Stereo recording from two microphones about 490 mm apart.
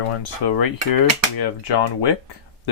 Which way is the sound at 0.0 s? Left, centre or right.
Left.